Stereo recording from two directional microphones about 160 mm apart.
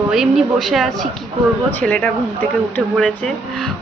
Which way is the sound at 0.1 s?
Centre (ahead or behind).